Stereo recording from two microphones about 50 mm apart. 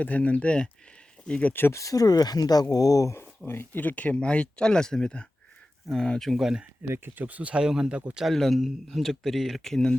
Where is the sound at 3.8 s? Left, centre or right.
Left; by 6.3 s centre.